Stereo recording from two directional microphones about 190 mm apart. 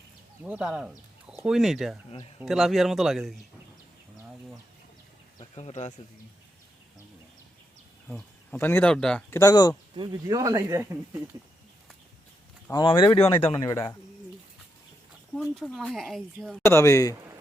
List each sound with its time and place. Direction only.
0.4 s speech: 5° right (ahead or behind)
5.5 s a man's voice: 35° left (ahead or behind)
8.1 s speech: 10° left (ahead or behind)
9.4 s speech: 20° left (ahead or behind)
9.9 s speech: 25° right (ahead or behind)
12.7 s speech: 25° left (ahead or behind)
15.4 s speech: 5° left (ahead or behind)
16.6 s speech: 15° left (ahead or behind)